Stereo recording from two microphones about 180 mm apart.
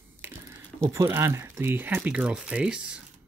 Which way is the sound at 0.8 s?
15° right (ahead or behind).